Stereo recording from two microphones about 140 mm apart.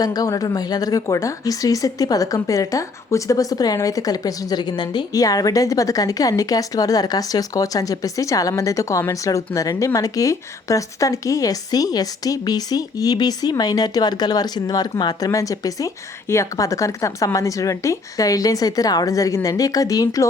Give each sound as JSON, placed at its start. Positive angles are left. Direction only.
{"t": 0.0, "sound": "a woman's voice", "side_deg": 25}